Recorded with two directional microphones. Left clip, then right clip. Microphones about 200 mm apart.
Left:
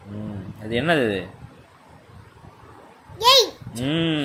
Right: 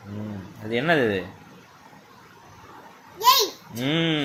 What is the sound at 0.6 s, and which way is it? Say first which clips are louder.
Speech: left 1 dB; 15° left (ahead or behind).